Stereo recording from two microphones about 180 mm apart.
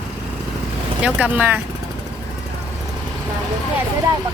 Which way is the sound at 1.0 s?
10° right (ahead or behind).